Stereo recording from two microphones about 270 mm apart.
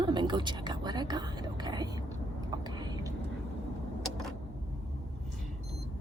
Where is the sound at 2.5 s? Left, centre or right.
Centre.